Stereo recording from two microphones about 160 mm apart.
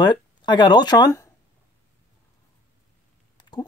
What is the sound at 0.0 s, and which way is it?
Speech, 30° left (ahead or behind).